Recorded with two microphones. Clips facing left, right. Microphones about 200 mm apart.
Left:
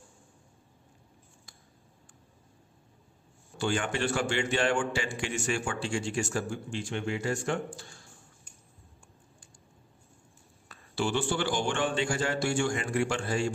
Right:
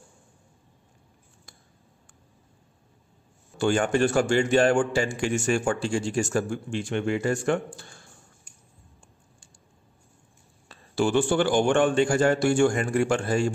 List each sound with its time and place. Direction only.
3.5 s a man's voice: 50° right (ahead or behind)
11.0 s a man's voice: 50° right (ahead or behind)